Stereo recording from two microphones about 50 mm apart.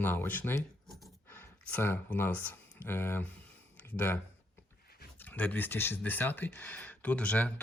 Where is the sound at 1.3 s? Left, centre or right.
Left.